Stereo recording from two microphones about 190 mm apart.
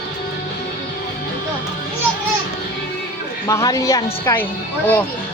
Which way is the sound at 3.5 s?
15° left (ahead or behind).